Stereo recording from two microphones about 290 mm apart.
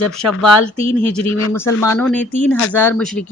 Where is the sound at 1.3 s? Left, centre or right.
Left.